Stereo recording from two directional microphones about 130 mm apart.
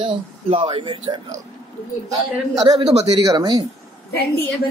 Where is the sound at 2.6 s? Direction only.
55° right (ahead or behind).